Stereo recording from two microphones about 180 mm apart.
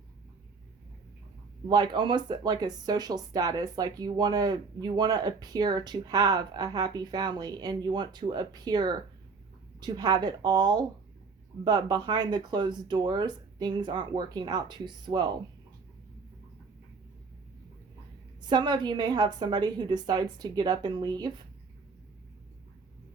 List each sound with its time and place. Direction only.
1.6 s speech: 25° right (ahead or behind)
18.4 s speech: 25° right (ahead or behind)